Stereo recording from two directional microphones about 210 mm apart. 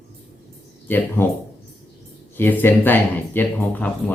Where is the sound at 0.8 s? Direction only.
10° left (ahead or behind).